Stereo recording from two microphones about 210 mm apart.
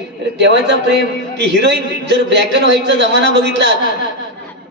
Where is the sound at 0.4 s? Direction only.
55° right (ahead or behind).